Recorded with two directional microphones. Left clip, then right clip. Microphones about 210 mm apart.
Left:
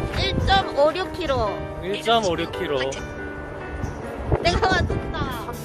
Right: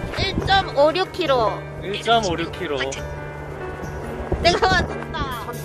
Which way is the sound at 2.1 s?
40° left (ahead or behind).